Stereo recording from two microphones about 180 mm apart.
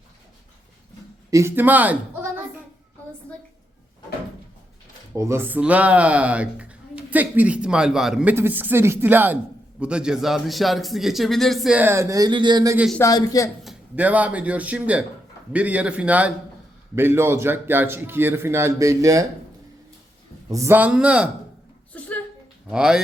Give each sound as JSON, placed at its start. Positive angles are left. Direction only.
{"t": 1.3, "sound": "speech", "side_deg": -15}
{"t": 5.1, "sound": "speech", "side_deg": -15}
{"t": 13.0, "sound": "speech", "side_deg": 20}
{"t": 13.7, "sound": "speech", "side_deg": -10}
{"t": 20.5, "sound": "speech", "side_deg": -15}
{"t": 21.9, "sound": "a sound", "side_deg": 5}
{"t": 22.7, "sound": "speech", "side_deg": -5}